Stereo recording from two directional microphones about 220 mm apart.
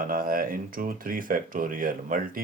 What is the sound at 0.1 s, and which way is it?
Speech, 40° right (ahead or behind).